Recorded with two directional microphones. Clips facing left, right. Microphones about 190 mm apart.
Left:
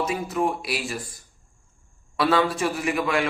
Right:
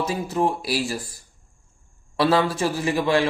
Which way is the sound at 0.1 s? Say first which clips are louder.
Right 2 dB; 30° right (ahead or behind).